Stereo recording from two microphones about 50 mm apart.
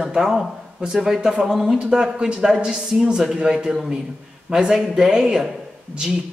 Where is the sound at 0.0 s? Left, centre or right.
Centre.